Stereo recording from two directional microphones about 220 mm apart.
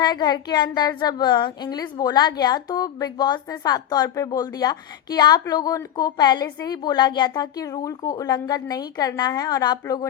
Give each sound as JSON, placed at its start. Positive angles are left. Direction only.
{"t": 0.0, "sound": "a woman's voice", "side_deg": 20}